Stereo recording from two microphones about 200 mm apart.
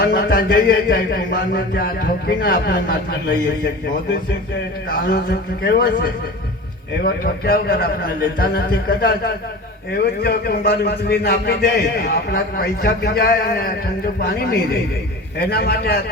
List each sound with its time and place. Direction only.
0.0 s a man's voice: 45° left (ahead or behind)
4.9 s a man's voice: 50° left (ahead or behind)
7.0 s a man's voice: 50° left (ahead or behind)